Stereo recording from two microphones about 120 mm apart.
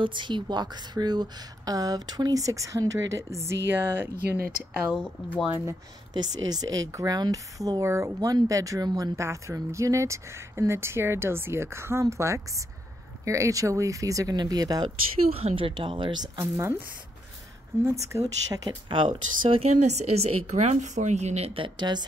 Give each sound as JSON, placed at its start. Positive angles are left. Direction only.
{"t": 0.0, "sound": "a woman's voice", "side_deg": -40}
{"t": 4.5, "sound": "speech", "side_deg": -5}
{"t": 6.1, "sound": "speech", "side_deg": -35}
{"t": 15.3, "sound": "speech", "side_deg": -50}
{"t": 16.3, "sound": "speech", "side_deg": -20}
{"t": 17.8, "sound": "speech", "side_deg": -25}
{"t": 18.9, "sound": "speech", "side_deg": -45}
{"t": 19.6, "sound": "a woman's voice", "side_deg": -75}
{"t": 21.5, "sound": "a woman's voice", "side_deg": -40}